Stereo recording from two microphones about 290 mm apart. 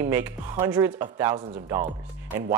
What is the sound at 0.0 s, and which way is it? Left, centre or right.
Speech, centre.